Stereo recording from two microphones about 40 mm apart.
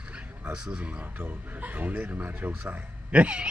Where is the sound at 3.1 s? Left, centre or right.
Right.